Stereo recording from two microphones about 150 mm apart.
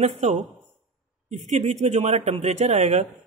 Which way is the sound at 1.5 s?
50° right (ahead or behind).